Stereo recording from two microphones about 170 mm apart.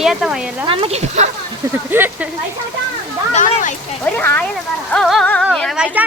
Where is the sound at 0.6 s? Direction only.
30° right (ahead or behind).